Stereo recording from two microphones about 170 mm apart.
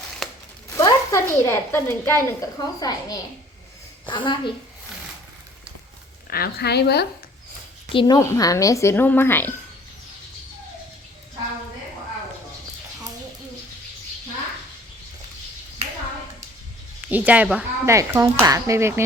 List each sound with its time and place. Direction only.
0.2 s a sound: centre (ahead or behind)
0.8 s a woman's voice: 15° left (ahead or behind)
6.3 s a woman's voice: 65° left (ahead or behind)
7.9 s a woman's voice: 25° left (ahead or behind)
17.1 s speech: 10° right (ahead or behind)